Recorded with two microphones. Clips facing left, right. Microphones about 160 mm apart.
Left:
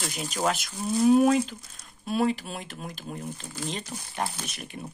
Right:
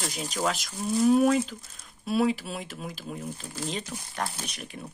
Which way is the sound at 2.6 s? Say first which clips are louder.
Right 1 dB; centre (ahead or behind).